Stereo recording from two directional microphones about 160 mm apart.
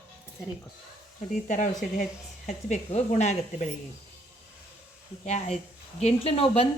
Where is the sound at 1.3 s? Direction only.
50° left (ahead or behind).